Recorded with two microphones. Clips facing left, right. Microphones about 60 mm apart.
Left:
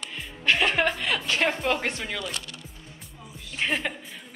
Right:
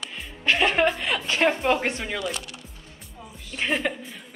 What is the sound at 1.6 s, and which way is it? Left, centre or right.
Speech, centre.